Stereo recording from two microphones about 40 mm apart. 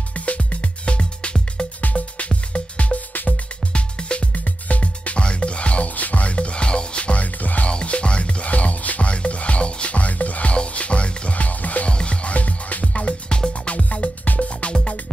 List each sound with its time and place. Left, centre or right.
0.1 s music: left
1.8 s music: left
4.5 s music: left
7.6 s music: left
11.9 s music: left
12.8 s music: left
14.6 s music: left